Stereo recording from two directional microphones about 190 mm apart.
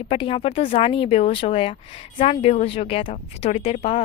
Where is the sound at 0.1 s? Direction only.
30° left (ahead or behind).